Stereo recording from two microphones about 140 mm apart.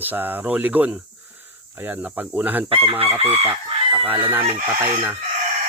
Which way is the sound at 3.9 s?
10° right (ahead or behind).